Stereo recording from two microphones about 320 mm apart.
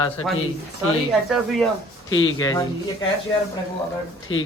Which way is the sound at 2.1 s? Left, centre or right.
Left.